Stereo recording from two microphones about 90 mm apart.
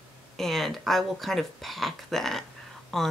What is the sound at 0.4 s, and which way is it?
Speech, centre (ahead or behind).